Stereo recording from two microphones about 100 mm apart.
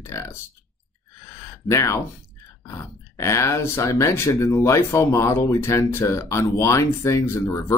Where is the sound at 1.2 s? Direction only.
25° left (ahead or behind).